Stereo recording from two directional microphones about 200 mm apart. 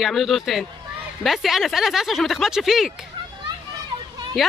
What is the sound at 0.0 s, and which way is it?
Speech, centre (ahead or behind).